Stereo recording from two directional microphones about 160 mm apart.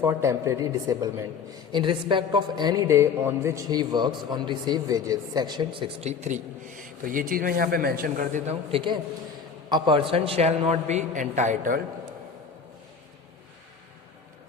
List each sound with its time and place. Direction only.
0.0 s a man's voice: 20° right (ahead or behind); by 8.5 s 55° right (ahead or behind)
8.7 s a man's voice: 30° right (ahead or behind); by 11.8 s 50° right (ahead or behind)